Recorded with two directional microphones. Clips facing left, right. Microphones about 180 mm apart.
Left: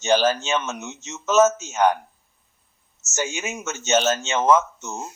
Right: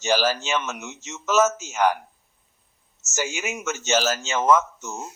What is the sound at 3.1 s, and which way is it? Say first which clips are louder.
Speech: left 1 dB; 25° left (ahead or behind).